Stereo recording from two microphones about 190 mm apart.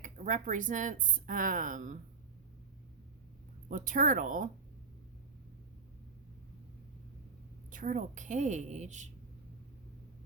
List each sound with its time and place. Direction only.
0.0 s speech: 40° right (ahead or behind)
3.7 s speech: 45° right (ahead or behind)
7.7 s a woman's voice: 45° right (ahead or behind)